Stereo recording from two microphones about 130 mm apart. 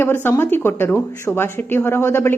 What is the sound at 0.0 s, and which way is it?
A woman's voice, 15° left (ahead or behind).